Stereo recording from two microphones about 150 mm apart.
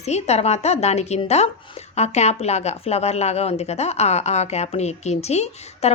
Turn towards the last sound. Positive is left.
turn(degrees=45)  # may be behind; listen again after turning